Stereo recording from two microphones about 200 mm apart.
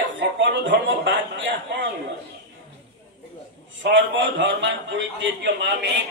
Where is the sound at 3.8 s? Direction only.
65° right (ahead or behind).